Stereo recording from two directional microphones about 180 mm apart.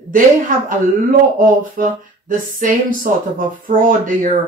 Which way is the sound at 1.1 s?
50° right (ahead or behind).